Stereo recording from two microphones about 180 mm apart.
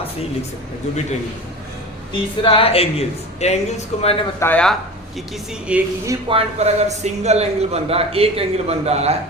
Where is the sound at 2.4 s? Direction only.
30° left (ahead or behind).